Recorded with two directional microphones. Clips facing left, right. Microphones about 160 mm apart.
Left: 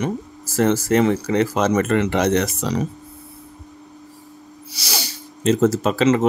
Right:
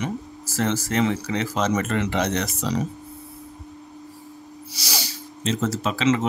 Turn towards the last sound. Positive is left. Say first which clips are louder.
# left 5 dB
turn(degrees=45)  # may be behind; listen again after turning